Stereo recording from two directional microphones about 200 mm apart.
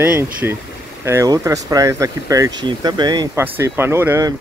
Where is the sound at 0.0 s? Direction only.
10° right (ahead or behind).